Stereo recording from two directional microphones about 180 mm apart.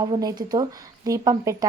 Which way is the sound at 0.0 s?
20° right (ahead or behind).